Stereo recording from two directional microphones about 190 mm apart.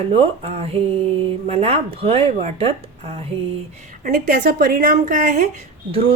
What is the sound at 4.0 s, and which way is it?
Speech, 45° right (ahead or behind).